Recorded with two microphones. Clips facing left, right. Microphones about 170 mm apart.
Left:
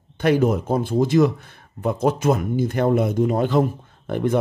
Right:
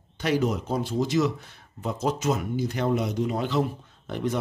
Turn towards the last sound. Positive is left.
turn(degrees=55)  # may be behind; listen again after turning